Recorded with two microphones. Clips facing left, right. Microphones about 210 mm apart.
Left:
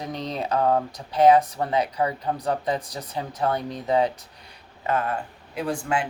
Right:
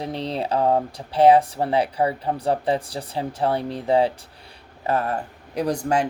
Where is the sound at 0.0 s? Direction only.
30° right (ahead or behind).